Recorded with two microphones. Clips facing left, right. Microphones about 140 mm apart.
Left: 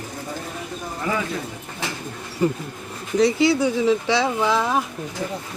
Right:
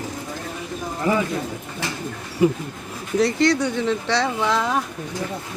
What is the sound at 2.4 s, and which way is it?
Speech, 10° right (ahead or behind).